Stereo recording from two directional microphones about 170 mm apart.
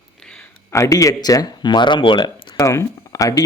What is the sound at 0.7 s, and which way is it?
Speech, 20° left (ahead or behind).